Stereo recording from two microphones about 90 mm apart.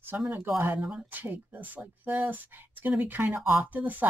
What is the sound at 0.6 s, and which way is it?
Speech, 20° right (ahead or behind).